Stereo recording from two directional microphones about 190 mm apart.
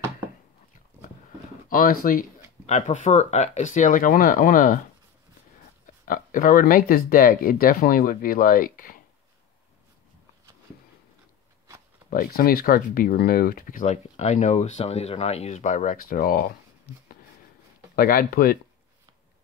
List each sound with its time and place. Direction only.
1.7 s speech: 50° left (ahead or behind)
6.0 s speech: 45° left (ahead or behind)
12.1 s speech: 50° left (ahead or behind)
17.9 s speech: 50° left (ahead or behind)